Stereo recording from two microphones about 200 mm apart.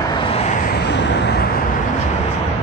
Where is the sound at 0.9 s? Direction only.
60° left (ahead or behind).